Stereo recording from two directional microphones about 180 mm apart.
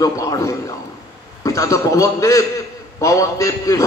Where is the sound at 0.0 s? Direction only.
20° left (ahead or behind).